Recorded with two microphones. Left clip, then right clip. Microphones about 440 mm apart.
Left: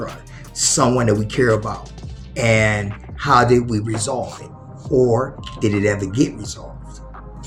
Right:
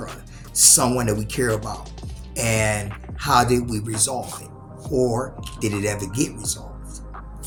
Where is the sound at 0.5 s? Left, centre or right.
Right.